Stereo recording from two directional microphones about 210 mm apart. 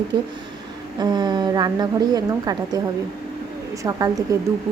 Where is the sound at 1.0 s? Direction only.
20° right (ahead or behind).